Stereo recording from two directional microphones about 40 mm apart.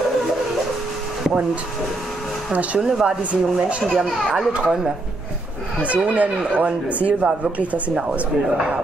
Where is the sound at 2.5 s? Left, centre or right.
Right.